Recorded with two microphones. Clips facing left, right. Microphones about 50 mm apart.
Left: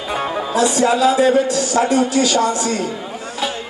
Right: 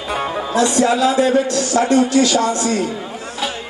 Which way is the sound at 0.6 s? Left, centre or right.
Centre.